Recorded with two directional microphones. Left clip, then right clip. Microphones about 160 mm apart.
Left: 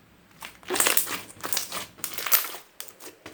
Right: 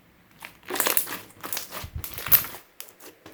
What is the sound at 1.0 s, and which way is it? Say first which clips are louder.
Crumpling: left 3 dB; 5° right (ahead or behind).